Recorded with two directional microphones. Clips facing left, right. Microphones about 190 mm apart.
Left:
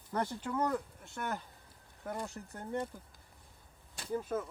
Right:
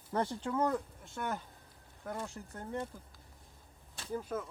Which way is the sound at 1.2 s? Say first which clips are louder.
Right 1 dB; centre (ahead or behind).